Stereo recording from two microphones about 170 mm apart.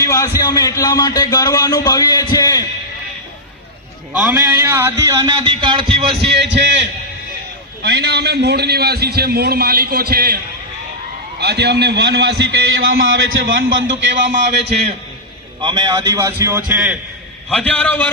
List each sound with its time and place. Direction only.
0.0 s a man's voice: 20° left (ahead or behind)
4.1 s a man's voice: 5° right (ahead or behind); by 6.1 s 35° right (ahead or behind)
6.3 s a man's voice: 90° right
7.8 s a man's voice: 75° right (ahead or behind)
11.3 s a man's voice: 75° right (ahead or behind)
13.4 s a man's voice: 90° right
15.6 s a man's voice: 25° right (ahead or behind); by 17.0 s 10° right (ahead or behind)
17.5 s a man's voice: 5° left (ahead or behind)